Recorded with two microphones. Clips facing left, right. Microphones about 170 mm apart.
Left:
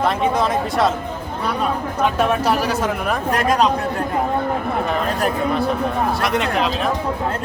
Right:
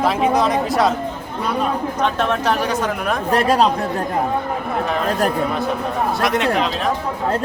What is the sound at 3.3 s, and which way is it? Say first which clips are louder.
Speech: right 3 dB; 30° right (ahead or behind).